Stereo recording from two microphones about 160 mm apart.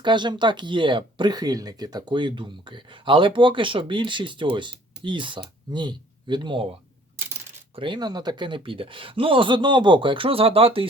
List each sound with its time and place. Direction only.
0.0 s speech: 30° right (ahead or behind)
7.8 s speech: 25° right (ahead or behind)